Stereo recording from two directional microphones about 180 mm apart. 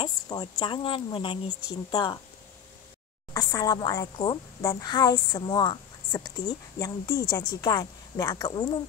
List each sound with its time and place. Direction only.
0.0 s a woman's voice: 25° left (ahead or behind)
3.3 s a woman's voice: 20° left (ahead or behind)